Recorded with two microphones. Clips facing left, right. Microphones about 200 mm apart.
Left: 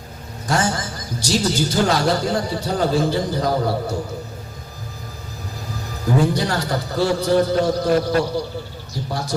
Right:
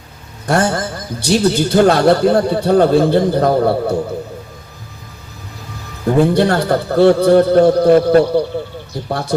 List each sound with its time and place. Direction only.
0.4 s a man's voice: 60° right (ahead or behind)
6.3 s a man's voice: 60° right (ahead or behind)